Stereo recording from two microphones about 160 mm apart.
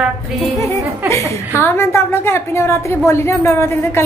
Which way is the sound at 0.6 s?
20° left (ahead or behind).